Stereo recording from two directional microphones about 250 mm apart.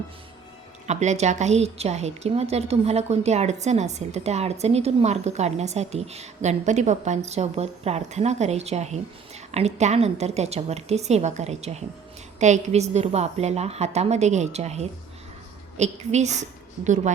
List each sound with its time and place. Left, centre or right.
0.9 s a woman's voice: right